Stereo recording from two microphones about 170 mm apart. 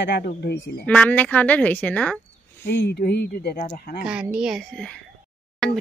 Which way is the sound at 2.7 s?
75° left (ahead or behind).